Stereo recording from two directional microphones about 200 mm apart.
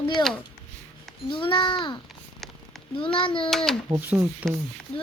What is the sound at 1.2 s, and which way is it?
Child singing, 25° left (ahead or behind).